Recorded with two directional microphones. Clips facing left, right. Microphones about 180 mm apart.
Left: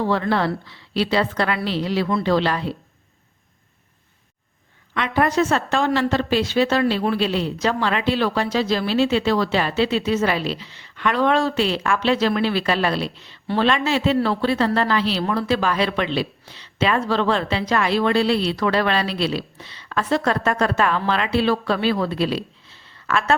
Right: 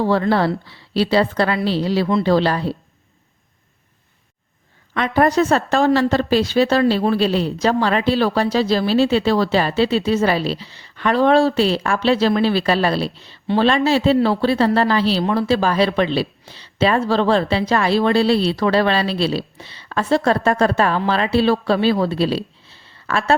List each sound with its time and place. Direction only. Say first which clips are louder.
0.0 s a woman's voice: right 4 dB; 35° right (ahead or behind)
4.9 s a woman's voice: right 3 dB; 40° right (ahead or behind)